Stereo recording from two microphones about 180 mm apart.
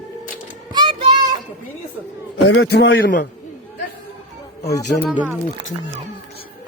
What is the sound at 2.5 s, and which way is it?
Speech, 80° left.